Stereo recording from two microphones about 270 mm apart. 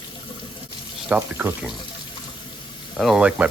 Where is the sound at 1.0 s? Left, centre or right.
Centre.